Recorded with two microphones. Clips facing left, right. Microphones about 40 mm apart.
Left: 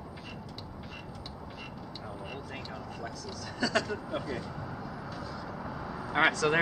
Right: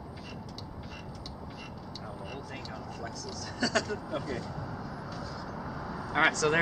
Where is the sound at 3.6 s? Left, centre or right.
Centre.